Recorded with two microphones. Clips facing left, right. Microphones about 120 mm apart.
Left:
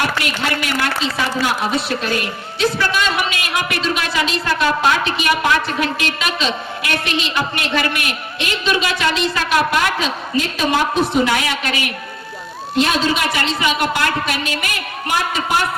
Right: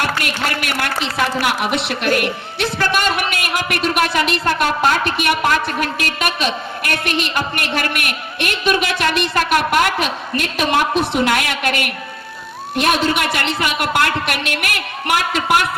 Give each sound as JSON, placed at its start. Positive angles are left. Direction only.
{"t": 0.2, "sound": "a woman's voice", "side_deg": -55}